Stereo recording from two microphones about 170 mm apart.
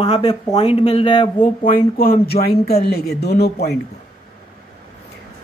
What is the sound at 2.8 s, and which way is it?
Speech, 70° left (ahead or behind).